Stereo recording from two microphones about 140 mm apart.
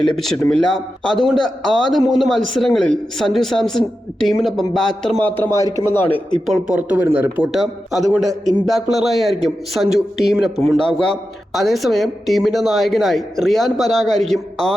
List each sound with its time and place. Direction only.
0.0 s a man's voice: 5° left (ahead or behind)
5.2 s a man's voice: 15° left (ahead or behind)
6.4 s speech: 5° right (ahead or behind)
7.5 s a man's voice: centre (ahead or behind)